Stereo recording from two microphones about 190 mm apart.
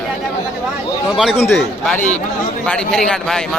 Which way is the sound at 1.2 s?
Centre (ahead or behind).